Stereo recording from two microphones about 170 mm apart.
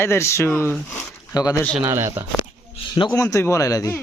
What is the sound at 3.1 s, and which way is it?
Speech, 15° left (ahead or behind).